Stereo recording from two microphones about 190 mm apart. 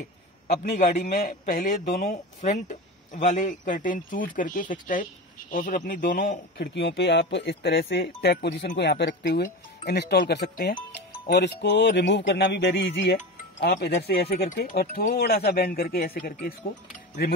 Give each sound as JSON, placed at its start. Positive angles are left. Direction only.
{"t": 0.5, "sound": "a man's voice", "side_deg": 40}
{"t": 6.7, "sound": "speech", "side_deg": 65}